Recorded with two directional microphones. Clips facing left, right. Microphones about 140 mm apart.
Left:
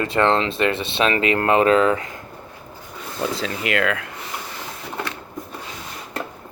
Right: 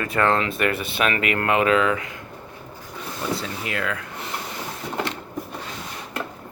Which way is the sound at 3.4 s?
85° left.